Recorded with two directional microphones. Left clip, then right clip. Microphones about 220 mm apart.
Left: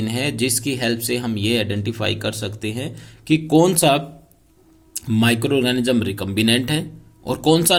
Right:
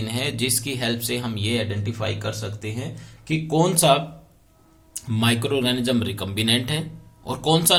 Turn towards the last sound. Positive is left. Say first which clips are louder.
# left 3 dB
turn(degrees=40)  # may be behind; listen again after turning